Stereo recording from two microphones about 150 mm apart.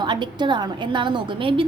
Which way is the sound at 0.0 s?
30° right (ahead or behind).